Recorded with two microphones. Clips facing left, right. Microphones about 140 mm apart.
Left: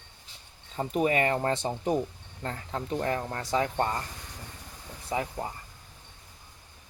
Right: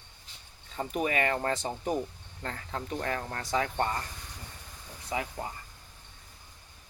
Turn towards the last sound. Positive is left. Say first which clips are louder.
# left 3 dB
turn(degrees=30)  # may be behind; listen again after turning